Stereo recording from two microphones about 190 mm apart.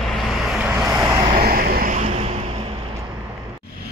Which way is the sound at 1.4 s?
50° right (ahead or behind).